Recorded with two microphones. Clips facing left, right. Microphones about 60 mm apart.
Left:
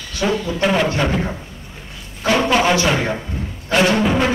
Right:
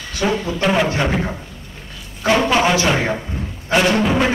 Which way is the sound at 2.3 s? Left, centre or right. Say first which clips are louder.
Even; centre.